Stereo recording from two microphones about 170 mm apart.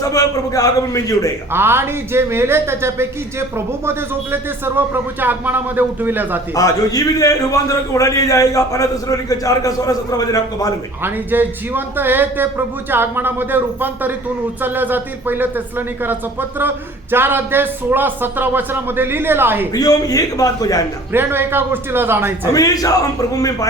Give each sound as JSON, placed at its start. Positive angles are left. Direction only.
{"t": 0.0, "sound": "a man's voice", "side_deg": 20}
{"t": 1.5, "sound": "speech", "side_deg": -15}
{"t": 6.5, "sound": "a man's voice", "side_deg": 20}
{"t": 11.0, "sound": "speech", "side_deg": -10}
{"t": 19.7, "sound": "a man's voice", "side_deg": 20}
{"t": 21.1, "sound": "speech", "side_deg": -15}
{"t": 22.5, "sound": "a man's voice", "side_deg": 20}